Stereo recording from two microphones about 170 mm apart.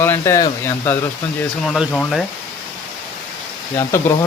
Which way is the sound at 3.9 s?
15° left (ahead or behind).